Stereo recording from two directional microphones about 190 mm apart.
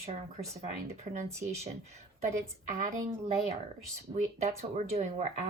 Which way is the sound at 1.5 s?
35° right (ahead or behind).